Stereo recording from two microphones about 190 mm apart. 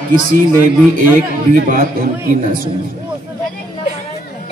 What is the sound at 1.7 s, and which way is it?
Speech, 50° right (ahead or behind).